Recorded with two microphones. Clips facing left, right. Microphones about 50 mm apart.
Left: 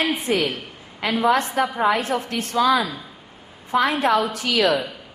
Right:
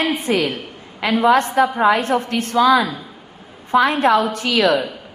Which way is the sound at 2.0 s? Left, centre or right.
Right.